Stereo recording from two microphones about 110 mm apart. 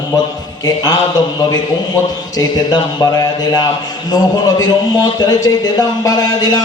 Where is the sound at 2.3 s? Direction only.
35° left (ahead or behind).